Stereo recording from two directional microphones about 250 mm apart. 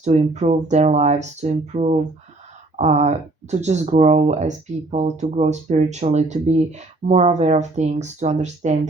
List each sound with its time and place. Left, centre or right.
0.0 s speech: right